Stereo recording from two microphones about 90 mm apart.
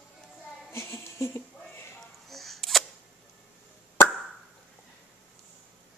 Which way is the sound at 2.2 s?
Centre (ahead or behind).